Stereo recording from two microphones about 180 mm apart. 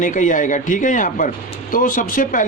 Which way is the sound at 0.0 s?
45° left (ahead or behind).